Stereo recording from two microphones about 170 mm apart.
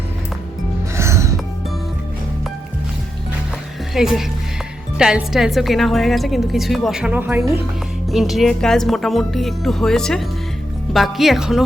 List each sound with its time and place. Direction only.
0.9 s music: 15° right (ahead or behind)
3.9 s a woman's voice: centre (ahead or behind)
8.1 s a woman's voice: centre (ahead or behind)